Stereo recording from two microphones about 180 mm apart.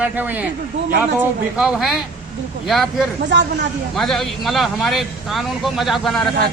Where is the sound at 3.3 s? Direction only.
85° right.